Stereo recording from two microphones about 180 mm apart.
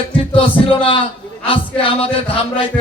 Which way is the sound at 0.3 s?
30° left (ahead or behind).